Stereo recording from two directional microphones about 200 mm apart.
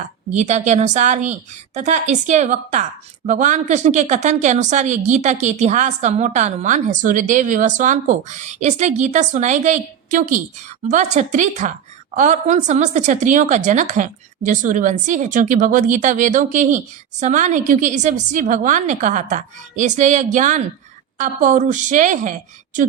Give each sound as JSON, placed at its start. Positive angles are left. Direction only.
{"t": 0.3, "sound": "a woman's voice", "side_deg": -35}